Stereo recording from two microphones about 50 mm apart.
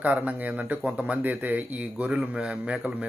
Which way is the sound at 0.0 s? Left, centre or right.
Right.